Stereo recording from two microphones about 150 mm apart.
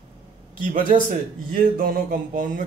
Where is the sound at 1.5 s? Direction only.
70° right (ahead or behind).